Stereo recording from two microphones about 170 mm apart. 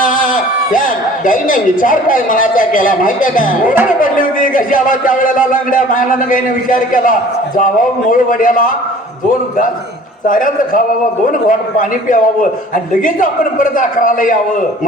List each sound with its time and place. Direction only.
0.0 s a sound: 50° left (ahead or behind)
1.2 s speech: 50° left (ahead or behind)
10.2 s speech: 50° left (ahead or behind)